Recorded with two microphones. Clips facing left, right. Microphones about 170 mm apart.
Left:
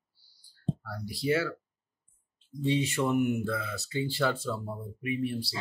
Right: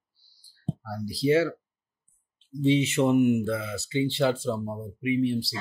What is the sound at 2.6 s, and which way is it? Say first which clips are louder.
Speech: right 6 dB; 25° right (ahead or behind).